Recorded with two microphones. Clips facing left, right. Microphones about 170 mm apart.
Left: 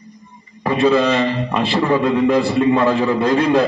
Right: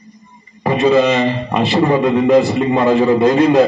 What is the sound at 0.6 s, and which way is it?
A man's voice, 20° right (ahead or behind).